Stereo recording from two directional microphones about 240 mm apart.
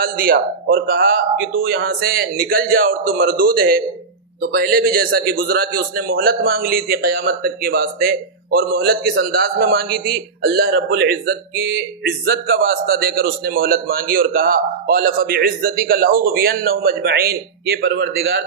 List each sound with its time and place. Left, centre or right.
0.0 s a man's voice: right